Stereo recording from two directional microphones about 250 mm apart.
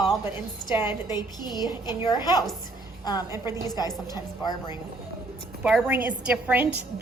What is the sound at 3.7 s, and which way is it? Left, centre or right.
A woman's voice, centre.